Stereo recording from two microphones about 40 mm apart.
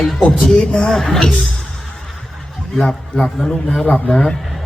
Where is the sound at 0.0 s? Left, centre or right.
Centre.